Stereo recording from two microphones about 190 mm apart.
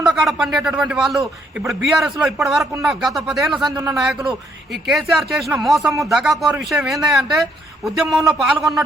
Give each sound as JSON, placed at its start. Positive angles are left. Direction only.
{"t": 0.1, "sound": "a man's voice", "side_deg": 0}